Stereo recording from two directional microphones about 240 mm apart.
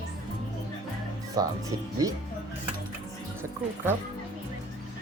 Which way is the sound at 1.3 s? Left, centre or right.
Centre.